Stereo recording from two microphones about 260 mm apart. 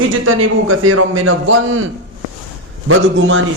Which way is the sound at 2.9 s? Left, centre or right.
Right.